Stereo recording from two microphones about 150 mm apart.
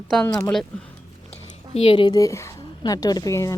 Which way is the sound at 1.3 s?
40° left (ahead or behind).